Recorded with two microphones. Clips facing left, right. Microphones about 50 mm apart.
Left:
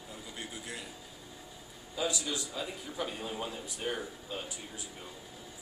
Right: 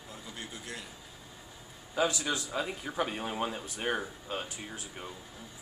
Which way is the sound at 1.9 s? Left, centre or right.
Right.